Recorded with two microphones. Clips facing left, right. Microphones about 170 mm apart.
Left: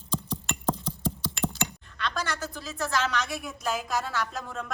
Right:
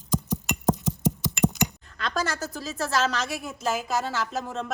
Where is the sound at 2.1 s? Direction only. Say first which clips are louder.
Right 7 dB; 45° right (ahead or behind).